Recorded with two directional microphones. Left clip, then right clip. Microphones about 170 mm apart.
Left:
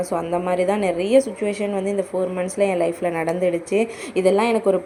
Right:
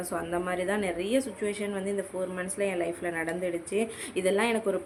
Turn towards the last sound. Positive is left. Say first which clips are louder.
# left 9 dB
turn(degrees=20)  # may be behind; listen again after turning